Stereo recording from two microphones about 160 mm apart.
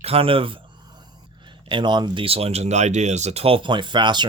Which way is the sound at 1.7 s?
30° right (ahead or behind).